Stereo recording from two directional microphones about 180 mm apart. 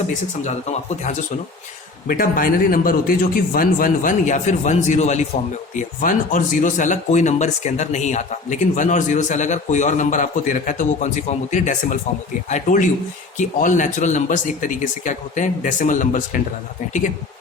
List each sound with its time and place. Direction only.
0.4 s speech: 40° left (ahead or behind)
2.0 s speech: 50° left (ahead or behind)